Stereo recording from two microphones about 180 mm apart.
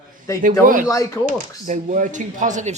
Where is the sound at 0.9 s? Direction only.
20° left (ahead or behind).